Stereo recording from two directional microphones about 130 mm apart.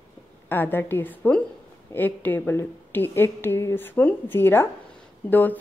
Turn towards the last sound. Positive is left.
turn(degrees=15)  # may be behind; listen again after turning